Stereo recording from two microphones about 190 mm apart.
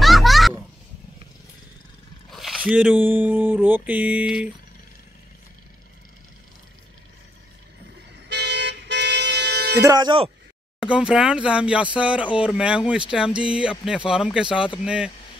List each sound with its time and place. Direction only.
0.0 s a sound: centre (ahead or behind)
2.3 s speech: 5° right (ahead or behind)
8.3 s toot: 65° right (ahead or behind)
9.8 s speech: 20° right (ahead or behind)
10.8 s speech: 5° right (ahead or behind)